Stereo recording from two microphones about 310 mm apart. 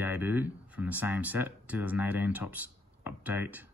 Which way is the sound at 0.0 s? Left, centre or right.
Centre.